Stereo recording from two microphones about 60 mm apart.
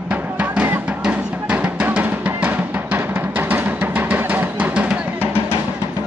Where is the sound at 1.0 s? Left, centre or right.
Right.